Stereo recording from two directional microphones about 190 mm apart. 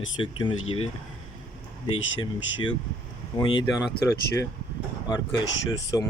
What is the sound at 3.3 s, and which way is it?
Speech, 25° left (ahead or behind).